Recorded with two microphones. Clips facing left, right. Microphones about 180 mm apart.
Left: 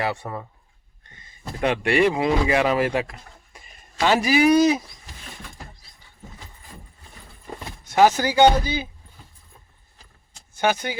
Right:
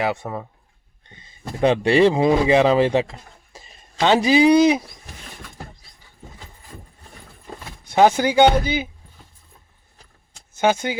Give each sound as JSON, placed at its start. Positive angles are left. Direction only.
{"t": 0.0, "sound": "chopping", "side_deg": -20}
{"t": 1.6, "sound": "speech", "side_deg": -25}
{"t": 7.9, "sound": "chopping", "side_deg": -20}
{"t": 8.6, "sound": "speech", "side_deg": -20}
{"t": 10.6, "sound": "speech", "side_deg": -20}